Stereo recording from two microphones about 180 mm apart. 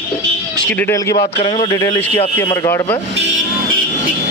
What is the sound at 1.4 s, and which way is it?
Speech, 30° left (ahead or behind).